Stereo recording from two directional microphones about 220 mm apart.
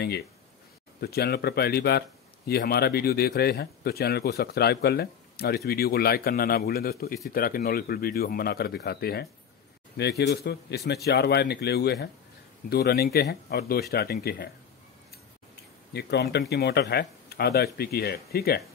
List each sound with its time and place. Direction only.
1.0 s speech: 45° left (ahead or behind)
15.9 s speech: 50° left (ahead or behind)